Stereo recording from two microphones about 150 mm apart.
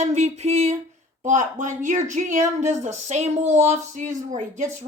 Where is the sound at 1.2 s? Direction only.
55° right (ahead or behind).